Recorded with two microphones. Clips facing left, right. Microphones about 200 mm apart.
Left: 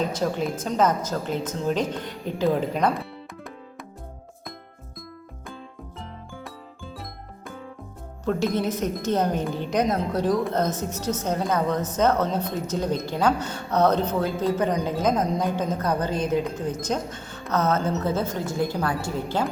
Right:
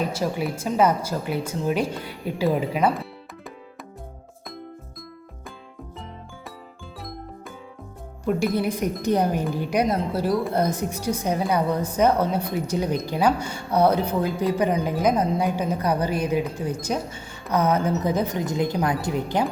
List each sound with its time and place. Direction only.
0.0 s speech: 10° right (ahead or behind)
8.2 s speech: 10° right (ahead or behind)